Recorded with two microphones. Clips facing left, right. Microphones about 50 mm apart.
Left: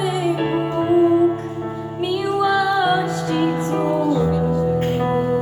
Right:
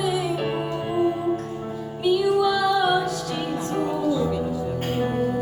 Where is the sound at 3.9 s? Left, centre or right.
Left.